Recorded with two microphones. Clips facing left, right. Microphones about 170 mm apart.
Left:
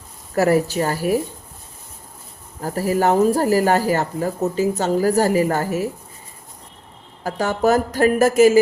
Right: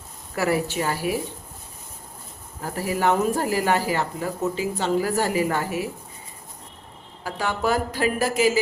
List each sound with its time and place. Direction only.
0.3 s speech: 40° left (ahead or behind)
2.6 s speech: 40° left (ahead or behind)
7.3 s speech: 45° left (ahead or behind)